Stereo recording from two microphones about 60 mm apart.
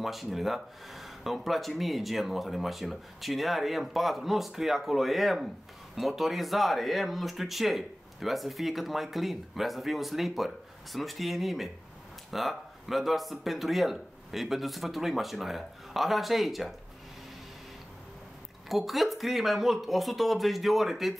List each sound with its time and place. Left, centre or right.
0.0 s speech: centre
18.7 s speech: centre